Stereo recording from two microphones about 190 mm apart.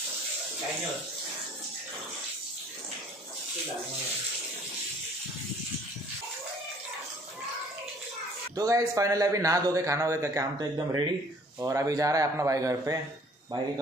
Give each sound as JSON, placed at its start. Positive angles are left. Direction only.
{"t": 8.5, "sound": "a man's voice", "side_deg": -15}